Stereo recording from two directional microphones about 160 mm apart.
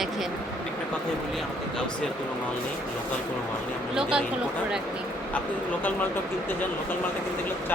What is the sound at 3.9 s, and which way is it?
Speech, 5° right (ahead or behind).